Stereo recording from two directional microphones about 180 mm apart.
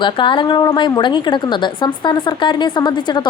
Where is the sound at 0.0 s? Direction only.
25° left (ahead or behind).